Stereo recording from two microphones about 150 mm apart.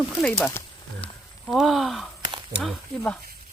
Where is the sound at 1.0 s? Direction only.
35° left (ahead or behind).